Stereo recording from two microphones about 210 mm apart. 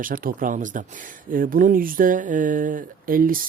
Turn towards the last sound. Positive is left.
turn(degrees=-40)  # may be behind; listen again after turning